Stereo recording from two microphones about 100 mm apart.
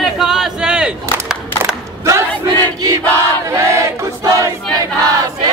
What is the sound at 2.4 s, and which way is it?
Battle cry, 40° right (ahead or behind).